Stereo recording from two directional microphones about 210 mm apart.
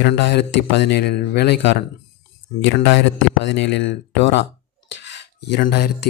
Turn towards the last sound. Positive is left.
turn(degrees=50)  # may be behind; listen again after turning